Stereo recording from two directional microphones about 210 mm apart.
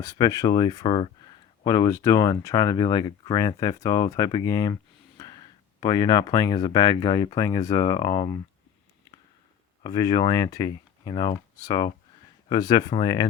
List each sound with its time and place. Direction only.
0.0 s speech: 15° left (ahead or behind)
9.8 s speech: 15° left (ahead or behind)